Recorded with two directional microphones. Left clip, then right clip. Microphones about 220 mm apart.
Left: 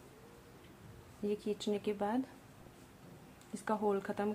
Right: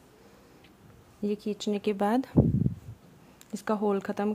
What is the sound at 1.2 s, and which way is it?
A woman's voice, 35° right (ahead or behind).